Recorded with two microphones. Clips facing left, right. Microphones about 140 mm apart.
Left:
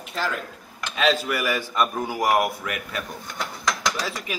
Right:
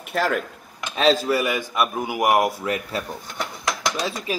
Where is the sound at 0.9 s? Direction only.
40° right (ahead or behind).